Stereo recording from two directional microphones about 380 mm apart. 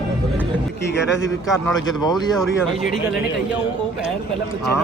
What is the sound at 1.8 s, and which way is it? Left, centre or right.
Speech, centre.